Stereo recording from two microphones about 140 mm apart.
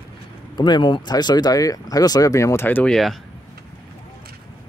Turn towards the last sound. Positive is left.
turn(degrees=5)  # may be behind; listen again after turning